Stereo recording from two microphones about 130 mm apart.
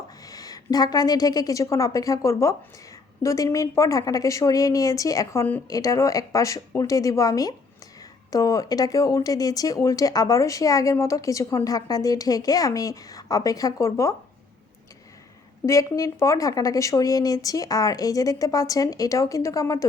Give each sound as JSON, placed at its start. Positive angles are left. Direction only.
{"t": 0.2, "sound": "a woman's voice", "side_deg": 30}
{"t": 5.6, "sound": "speech", "side_deg": 25}
{"t": 15.6, "sound": "speech", "side_deg": 25}